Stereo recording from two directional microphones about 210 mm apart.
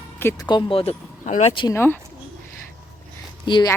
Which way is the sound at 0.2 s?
15° left (ahead or behind).